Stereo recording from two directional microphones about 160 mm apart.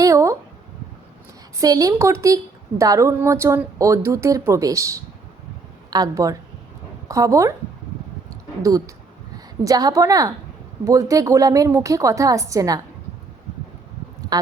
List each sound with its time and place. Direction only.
0.0 s a sound: 20° right (ahead or behind)
1.5 s a woman's voice: 20° right (ahead or behind)
9.6 s a woman's voice: 20° right (ahead or behind)